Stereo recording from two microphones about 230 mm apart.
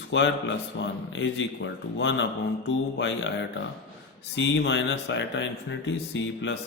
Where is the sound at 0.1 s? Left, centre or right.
Left.